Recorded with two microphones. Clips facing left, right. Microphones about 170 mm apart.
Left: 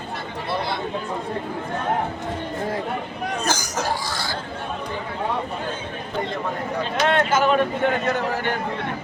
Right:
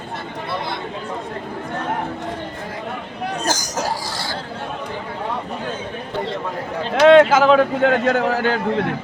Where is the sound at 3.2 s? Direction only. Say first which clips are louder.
Right 3 dB; 40° right (ahead or behind).